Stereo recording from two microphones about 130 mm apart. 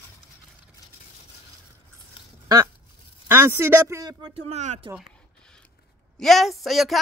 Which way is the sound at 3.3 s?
20° right (ahead or behind).